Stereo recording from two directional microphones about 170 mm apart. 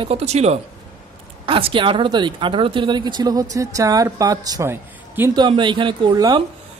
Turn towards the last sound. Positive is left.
turn(degrees=-25)  # may be behind; listen again after turning